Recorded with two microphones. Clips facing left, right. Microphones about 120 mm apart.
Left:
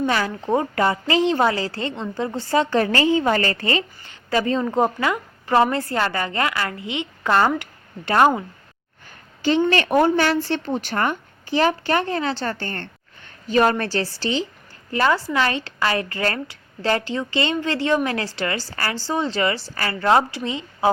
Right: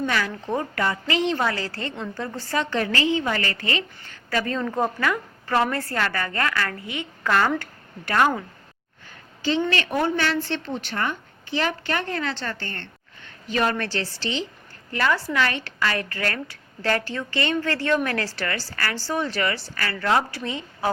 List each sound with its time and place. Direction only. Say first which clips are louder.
0.1 s a woman's voice: left 4 dB; 30° left (ahead or behind)
4.1 s a woman's voice: left 5 dB; 20° left (ahead or behind)
9.6 s a woman's voice: left 6 dB; 45° left (ahead or behind)
14.9 s a woman's voice: left 3 dB; 25° left (ahead or behind)